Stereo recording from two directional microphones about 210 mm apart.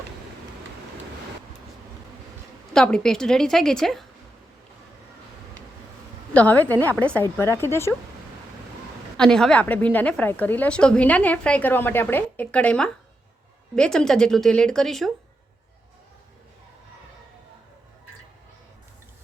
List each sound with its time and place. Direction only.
2.7 s speech: 5° left (ahead or behind)
6.3 s a woman's voice: 5° left (ahead or behind)
9.1 s a woman's voice: 5° left (ahead or behind)